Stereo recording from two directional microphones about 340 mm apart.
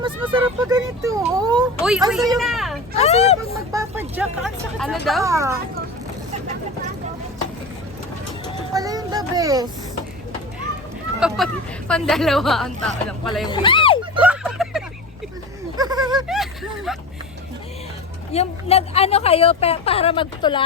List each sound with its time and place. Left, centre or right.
0.0 s speech: centre
3.0 s speech: centre
3.5 s speech: centre
8.7 s speech: centre
11.2 s speech: centre
13.5 s speech: centre
14.2 s a sound: centre
15.8 s a sound: centre
16.2 s a sound: centre
18.3 s speech: centre